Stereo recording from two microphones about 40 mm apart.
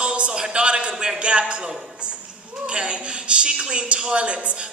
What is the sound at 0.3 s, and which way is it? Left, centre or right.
A man's voice, right.